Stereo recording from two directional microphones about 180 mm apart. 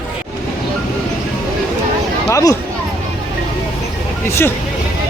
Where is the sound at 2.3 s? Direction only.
20° left (ahead or behind).